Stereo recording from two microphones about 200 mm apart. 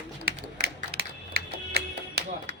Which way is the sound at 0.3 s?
50° right (ahead or behind).